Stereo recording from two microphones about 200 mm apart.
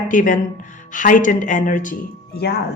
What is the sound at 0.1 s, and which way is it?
A woman's voice, 40° left (ahead or behind).